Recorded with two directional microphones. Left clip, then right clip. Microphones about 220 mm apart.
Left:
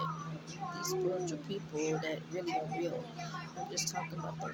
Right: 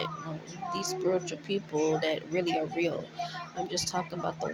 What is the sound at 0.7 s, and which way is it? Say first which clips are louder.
Speech: right 6 dB; 40° right (ahead or behind).